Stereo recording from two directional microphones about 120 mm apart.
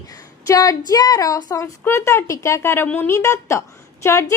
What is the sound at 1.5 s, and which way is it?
A woman's voice, 30° left (ahead or behind).